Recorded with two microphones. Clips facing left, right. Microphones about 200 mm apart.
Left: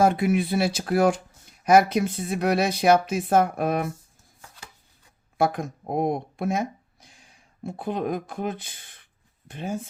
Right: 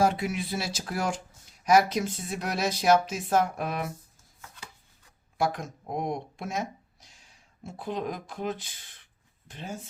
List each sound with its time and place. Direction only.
0.0 s speech: 55° left (ahead or behind)
5.4 s speech: 55° left (ahead or behind)